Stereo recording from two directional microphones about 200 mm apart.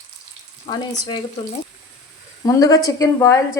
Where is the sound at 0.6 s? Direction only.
25° left (ahead or behind).